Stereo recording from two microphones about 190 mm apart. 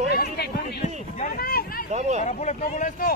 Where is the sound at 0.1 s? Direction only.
55° left (ahead or behind).